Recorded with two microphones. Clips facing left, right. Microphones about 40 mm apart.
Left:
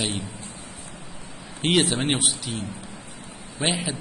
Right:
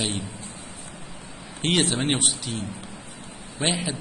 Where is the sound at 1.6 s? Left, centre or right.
Centre.